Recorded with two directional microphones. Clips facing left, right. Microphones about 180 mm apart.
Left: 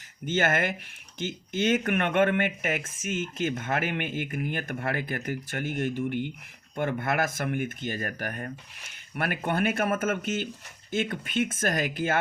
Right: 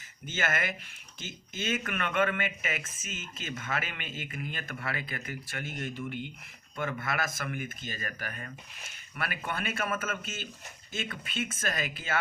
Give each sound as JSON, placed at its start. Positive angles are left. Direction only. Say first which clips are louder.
{"t": 0.3, "sound": "speech", "louder": "left 7 dB", "side_deg": 60}
{"t": 1.9, "sound": "speech", "louder": "left 6 dB", "side_deg": 60}
{"t": 4.8, "sound": "speech", "louder": "left 7 dB", "side_deg": 50}